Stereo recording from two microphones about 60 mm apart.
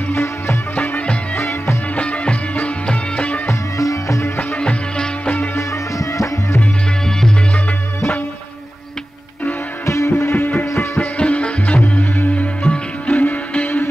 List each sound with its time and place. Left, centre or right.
0.1 s music: left
0.7 s music: left
1.4 s music: left
2.0 s music: centre
3.4 s music: left
4.6 s music: centre
5.3 s music: left
5.6 s music: left
7.1 s music: centre
9.8 s music: left
11.0 s music: left